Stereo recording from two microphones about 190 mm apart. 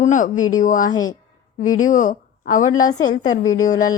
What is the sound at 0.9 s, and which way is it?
Speech, 20° left (ahead or behind).